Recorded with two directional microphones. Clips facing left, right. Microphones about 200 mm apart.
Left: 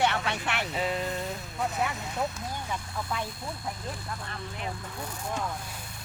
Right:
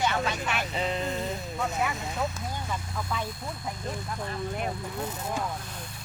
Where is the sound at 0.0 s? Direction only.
65° left (ahead or behind).